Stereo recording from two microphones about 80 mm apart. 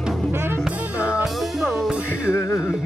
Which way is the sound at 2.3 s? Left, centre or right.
Left.